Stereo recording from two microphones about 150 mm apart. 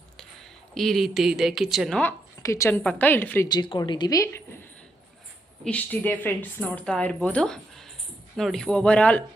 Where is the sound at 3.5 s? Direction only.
30° left (ahead or behind); by 9.2 s 10° left (ahead or behind).